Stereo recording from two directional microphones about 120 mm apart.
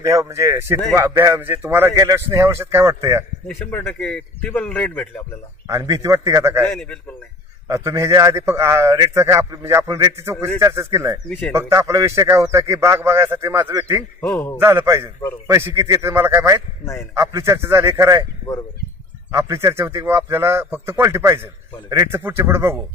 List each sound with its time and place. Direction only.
0.0 s a man's voice: 25° right (ahead or behind)
4.0 s speech: 10° left (ahead or behind)
5.7 s a man's voice: 25° right (ahead or behind)
6.7 s a man's voice: centre (ahead or behind)
7.6 s a man's voice: 25° right (ahead or behind)
14.2 s speech: 15° left (ahead or behind)
14.6 s a man's voice: 20° right (ahead or behind)
19.3 s a man's voice: 25° right (ahead or behind)